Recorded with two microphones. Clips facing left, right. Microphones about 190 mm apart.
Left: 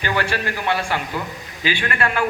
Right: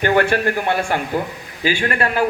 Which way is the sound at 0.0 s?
55° right (ahead or behind).